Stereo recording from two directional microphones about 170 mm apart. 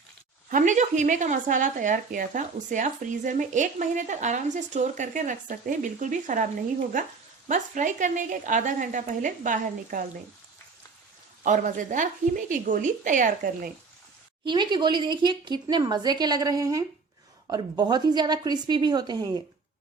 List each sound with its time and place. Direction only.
0.5 s speech: 45° right (ahead or behind)
11.4 s speech: 50° right (ahead or behind)
14.4 s speech: 25° right (ahead or behind)